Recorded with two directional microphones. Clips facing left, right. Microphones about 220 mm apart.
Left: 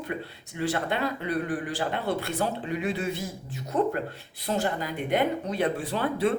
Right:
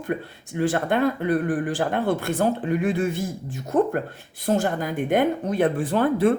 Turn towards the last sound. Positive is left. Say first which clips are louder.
# right 6 dB
turn(degrees=-50)  # may be behind; listen again after turning